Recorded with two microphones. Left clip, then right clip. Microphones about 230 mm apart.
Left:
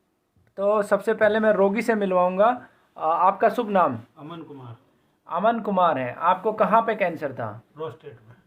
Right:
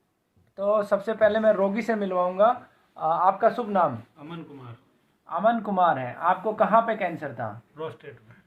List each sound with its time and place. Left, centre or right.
0.5 s speech: left
4.2 s speech: centre
5.2 s speech: left
7.8 s speech: centre